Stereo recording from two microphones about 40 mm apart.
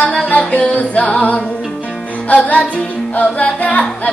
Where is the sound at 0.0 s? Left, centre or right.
Left.